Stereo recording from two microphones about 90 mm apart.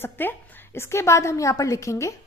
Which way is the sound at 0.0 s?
25° left (ahead or behind).